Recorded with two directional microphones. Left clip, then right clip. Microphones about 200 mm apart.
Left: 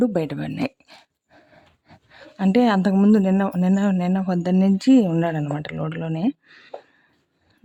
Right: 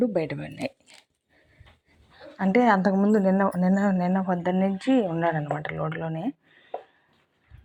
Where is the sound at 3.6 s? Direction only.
15° left (ahead or behind).